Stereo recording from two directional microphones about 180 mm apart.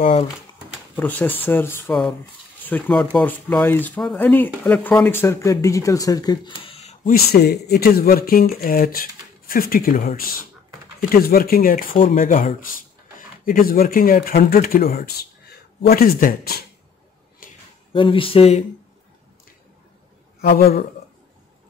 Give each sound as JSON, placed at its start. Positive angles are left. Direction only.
{"t": 0.0, "sound": "speech", "side_deg": 30}
{"t": 0.9, "sound": "speech", "side_deg": 10}
{"t": 7.1, "sound": "speech", "side_deg": 60}
{"t": 17.9, "sound": "speech", "side_deg": 30}
{"t": 20.4, "sound": "speech", "side_deg": 60}